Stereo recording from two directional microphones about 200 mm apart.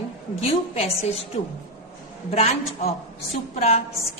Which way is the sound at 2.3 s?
30° left (ahead or behind).